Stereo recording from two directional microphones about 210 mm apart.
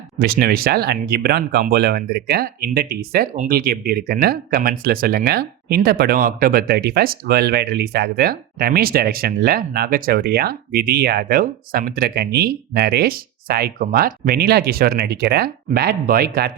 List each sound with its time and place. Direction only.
0.2 s speech: 45° right (ahead or behind)